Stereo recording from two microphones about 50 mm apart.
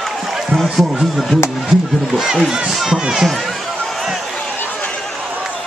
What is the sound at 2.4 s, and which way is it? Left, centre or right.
Speech, centre.